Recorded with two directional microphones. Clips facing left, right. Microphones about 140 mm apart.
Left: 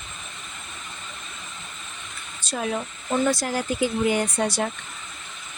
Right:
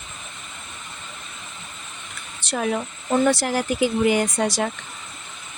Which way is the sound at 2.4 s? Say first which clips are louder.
Right 3 dB; 75° right (ahead or behind).